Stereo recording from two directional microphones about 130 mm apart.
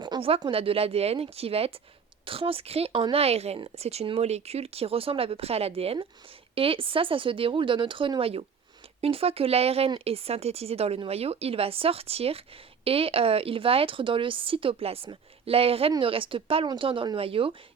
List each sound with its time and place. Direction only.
0.0 s speech: 40° right (ahead or behind)